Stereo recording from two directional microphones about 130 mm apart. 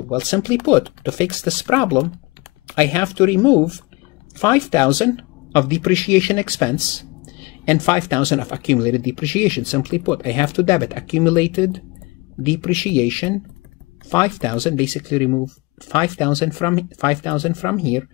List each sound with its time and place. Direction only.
0.1 s speech: 30° left (ahead or behind)
14.7 s speech: 20° left (ahead or behind)